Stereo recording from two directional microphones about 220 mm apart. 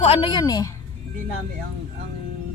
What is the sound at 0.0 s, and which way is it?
Speech, 25° left (ahead or behind).